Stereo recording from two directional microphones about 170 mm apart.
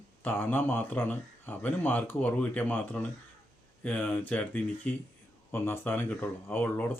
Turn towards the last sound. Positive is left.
turn(degrees=10)  # may be behind; listen again after turning